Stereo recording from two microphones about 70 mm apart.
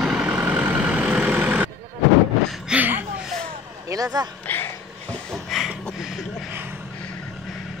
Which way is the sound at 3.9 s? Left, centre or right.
Right.